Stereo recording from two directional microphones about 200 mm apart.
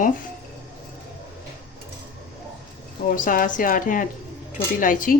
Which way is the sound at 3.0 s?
40° left (ahead or behind).